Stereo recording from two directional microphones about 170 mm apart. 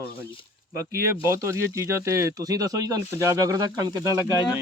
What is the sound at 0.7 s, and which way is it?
Speech, 15° right (ahead or behind).